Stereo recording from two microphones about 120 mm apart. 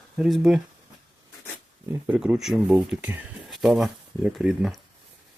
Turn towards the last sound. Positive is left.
turn(degrees=-5)  # may be behind; listen again after turning